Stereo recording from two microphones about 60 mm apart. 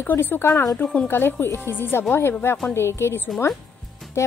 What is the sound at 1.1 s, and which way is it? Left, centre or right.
A woman's voice, left.